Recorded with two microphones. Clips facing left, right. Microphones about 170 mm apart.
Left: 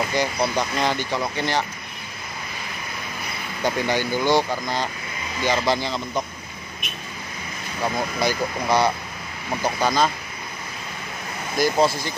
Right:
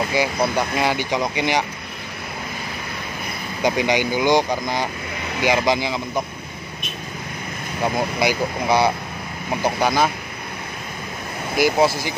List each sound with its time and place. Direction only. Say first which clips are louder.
0.1 s speech: right 2 dB; 10° right (ahead or behind)
3.6 s speech: right 3 dB; 15° right (ahead or behind)
8.2 s speech: right 1 dB; 10° right (ahead or behind)
11.5 s speech: right 2 dB; 10° right (ahead or behind)